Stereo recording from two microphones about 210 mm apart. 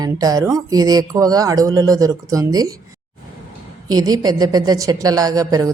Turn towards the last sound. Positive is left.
turn(degrees=-15)  # may be behind; listen again after turning